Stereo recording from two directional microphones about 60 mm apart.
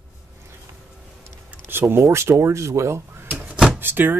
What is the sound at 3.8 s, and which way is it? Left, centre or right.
Speech, right.